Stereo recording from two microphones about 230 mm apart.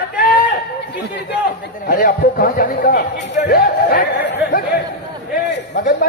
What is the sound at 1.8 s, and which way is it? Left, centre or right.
Speech, left.